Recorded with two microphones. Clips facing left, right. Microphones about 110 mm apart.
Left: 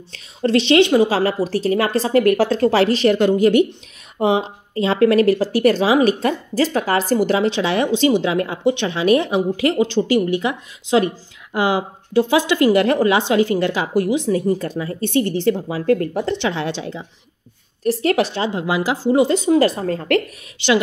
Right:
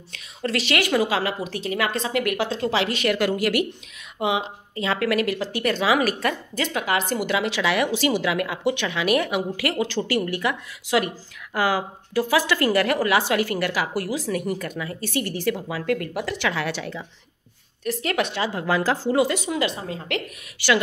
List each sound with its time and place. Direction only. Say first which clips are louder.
0.1 s speech: left 9 dB; 30° left (ahead or behind)
4.2 s a woman's voice: left 6 dB; 35° left (ahead or behind)
17.8 s speech: left 7 dB; 35° left (ahead or behind)
18.5 s speech: left 2 dB; 20° left (ahead or behind)
19.2 s a woman's voice: left 10 dB; 30° left (ahead or behind)
19.6 s a woman's voice: left 9 dB; 45° left (ahead or behind)
20.5 s speech: left 4 dB; 20° left (ahead or behind)